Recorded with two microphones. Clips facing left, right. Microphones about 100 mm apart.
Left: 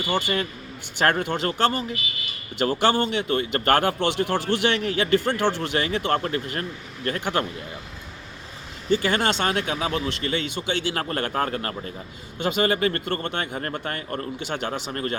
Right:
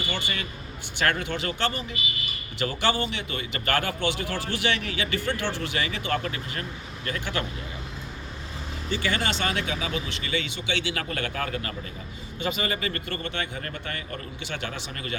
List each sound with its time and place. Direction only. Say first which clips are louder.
0.1 s speech: left 7 dB; 50° left (ahead or behind)
9.0 s speech: left 4 dB; 45° left (ahead or behind)
12.4 s speech: left 7 dB; 60° left (ahead or behind); by 15.2 s 45° left (ahead or behind)